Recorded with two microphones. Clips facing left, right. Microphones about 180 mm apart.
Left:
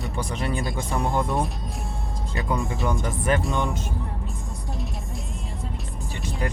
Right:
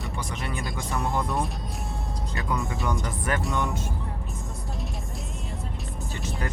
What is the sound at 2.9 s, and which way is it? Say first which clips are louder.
Speech: left 5 dB; 25° left (ahead or behind).